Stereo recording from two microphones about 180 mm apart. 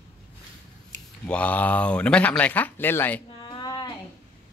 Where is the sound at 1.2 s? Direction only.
5° left (ahead or behind).